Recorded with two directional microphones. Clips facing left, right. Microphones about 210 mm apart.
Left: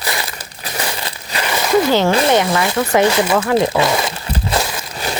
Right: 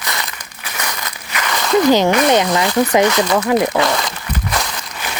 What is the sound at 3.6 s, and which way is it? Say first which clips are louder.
Crumpling: left 1 dB; 25° left (ahead or behind).